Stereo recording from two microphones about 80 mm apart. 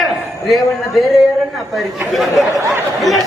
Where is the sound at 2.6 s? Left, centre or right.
Right.